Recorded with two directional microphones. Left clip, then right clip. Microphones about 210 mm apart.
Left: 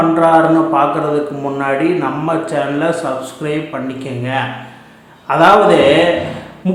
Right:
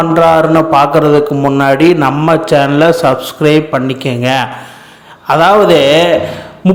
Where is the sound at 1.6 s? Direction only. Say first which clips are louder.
Right 6 dB; 45° right (ahead or behind).